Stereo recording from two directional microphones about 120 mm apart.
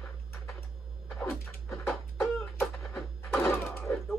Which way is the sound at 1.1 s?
5° left (ahead or behind).